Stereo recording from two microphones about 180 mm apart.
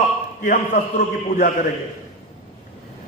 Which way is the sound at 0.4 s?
45° left (ahead or behind).